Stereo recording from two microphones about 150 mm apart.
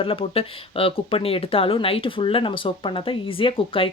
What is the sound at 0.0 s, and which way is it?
Speech, 40° left (ahead or behind).